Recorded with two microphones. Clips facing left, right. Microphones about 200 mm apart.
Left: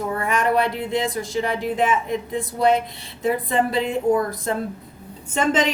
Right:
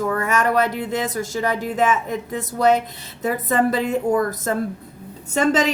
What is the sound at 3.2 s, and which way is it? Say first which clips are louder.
Speech: right 1 dB; 45° right (ahead or behind).